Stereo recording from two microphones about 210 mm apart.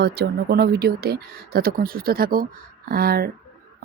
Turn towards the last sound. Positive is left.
turn(degrees=-45)  # may be behind; listen again after turning